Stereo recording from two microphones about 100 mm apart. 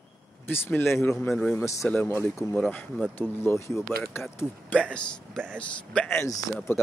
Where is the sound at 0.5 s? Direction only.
20° left (ahead or behind).